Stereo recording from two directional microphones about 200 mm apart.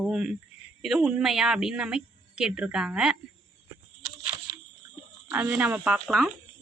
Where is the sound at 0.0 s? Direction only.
5° right (ahead or behind).